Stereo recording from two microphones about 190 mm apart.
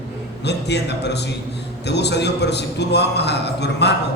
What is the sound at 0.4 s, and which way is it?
A man's voice, 60° left (ahead or behind).